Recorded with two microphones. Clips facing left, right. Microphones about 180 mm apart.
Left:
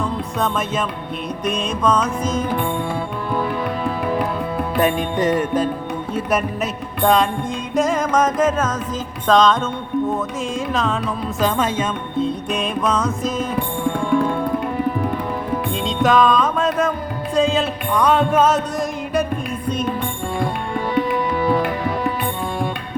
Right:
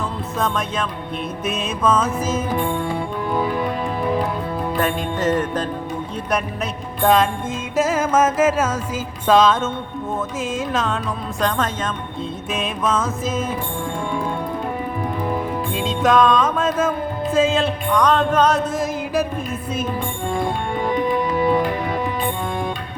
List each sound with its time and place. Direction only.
0.3 s music: centre (ahead or behind)
4.8 s speech: 15° left (ahead or behind)
7.0 s music: centre (ahead or behind)
10.7 s music: centre (ahead or behind)
11.3 s speech: 5° left (ahead or behind)
12.5 s music: centre (ahead or behind)
15.7 s music: centre (ahead or behind)
21.3 s music: 20° right (ahead or behind)